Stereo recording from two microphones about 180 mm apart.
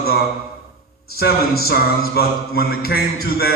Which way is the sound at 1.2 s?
60° left (ahead or behind).